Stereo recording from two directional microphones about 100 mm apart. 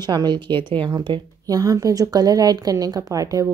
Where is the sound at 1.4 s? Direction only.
35° right (ahead or behind).